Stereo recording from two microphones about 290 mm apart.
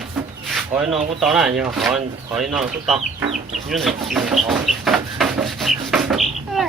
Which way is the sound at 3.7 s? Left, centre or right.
Centre.